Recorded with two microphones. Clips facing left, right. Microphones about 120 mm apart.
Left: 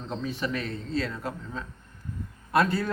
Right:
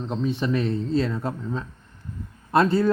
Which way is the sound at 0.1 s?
25° right (ahead or behind).